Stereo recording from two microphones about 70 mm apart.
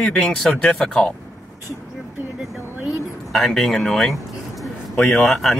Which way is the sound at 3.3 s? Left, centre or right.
Centre.